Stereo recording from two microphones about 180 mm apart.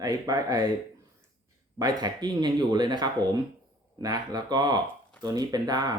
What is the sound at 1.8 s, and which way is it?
Speech, 20° right (ahead or behind).